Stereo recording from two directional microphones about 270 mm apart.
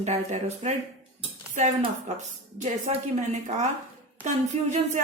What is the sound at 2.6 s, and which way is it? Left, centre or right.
Speech, right.